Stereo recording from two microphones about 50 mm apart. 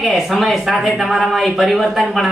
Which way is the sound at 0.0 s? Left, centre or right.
Centre.